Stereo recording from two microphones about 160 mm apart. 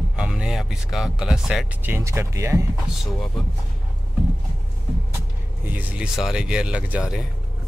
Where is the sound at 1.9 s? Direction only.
15° right (ahead or behind).